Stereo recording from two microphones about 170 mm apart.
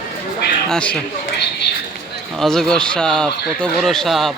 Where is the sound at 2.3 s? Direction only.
Centre (ahead or behind).